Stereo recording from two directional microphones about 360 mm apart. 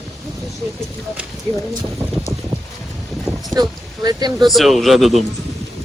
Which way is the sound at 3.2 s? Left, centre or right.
Centre.